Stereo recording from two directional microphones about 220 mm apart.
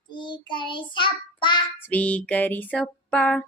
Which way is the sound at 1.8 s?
5° left (ahead or behind).